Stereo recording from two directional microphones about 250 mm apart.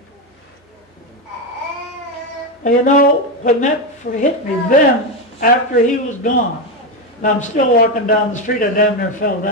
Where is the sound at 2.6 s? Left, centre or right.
Left.